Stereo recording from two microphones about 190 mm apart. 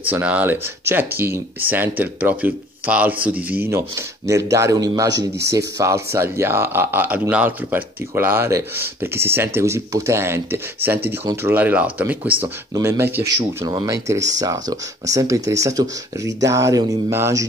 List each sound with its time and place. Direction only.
0.1 s speech: 10° right (ahead or behind)